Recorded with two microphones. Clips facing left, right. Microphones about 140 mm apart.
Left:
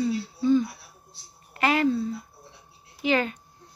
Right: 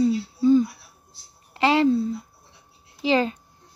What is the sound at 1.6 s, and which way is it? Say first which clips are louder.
Speech: right 4 dB; 25° right (ahead or behind).